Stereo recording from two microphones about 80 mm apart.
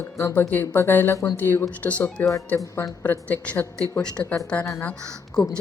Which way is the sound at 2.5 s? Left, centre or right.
Left.